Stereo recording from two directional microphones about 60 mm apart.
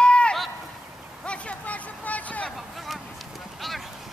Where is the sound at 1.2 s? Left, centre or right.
Left.